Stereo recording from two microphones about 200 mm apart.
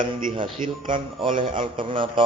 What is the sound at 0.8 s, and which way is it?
Speech, 25° right (ahead or behind).